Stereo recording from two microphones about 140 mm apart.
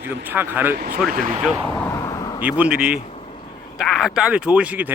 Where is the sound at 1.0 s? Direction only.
75° right (ahead or behind).